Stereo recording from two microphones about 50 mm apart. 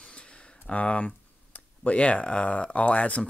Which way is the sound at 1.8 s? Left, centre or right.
Left.